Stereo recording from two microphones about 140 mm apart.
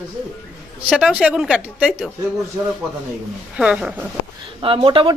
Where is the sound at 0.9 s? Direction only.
5° right (ahead or behind).